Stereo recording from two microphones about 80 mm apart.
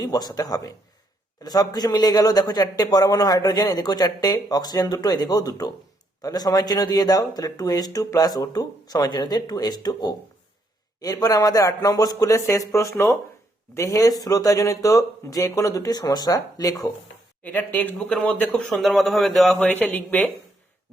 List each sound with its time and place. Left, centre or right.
0.0 s a man's voice: left
17.4 s a man's voice: left
18.7 s a man's voice: centre
19.6 s a man's voice: centre